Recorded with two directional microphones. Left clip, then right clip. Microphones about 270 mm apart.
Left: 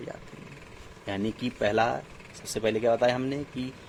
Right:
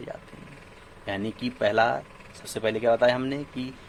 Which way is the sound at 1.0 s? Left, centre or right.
Centre.